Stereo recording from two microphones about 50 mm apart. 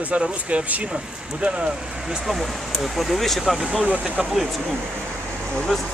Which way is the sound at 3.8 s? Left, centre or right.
Right.